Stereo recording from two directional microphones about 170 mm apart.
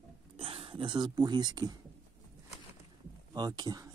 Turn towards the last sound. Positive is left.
turn(degrees=-20)  # may be behind; listen again after turning